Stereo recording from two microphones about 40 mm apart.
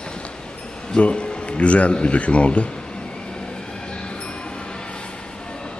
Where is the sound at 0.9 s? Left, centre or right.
Left.